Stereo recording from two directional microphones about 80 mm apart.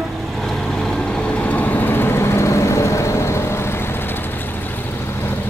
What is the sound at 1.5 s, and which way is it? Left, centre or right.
Vehicle, left.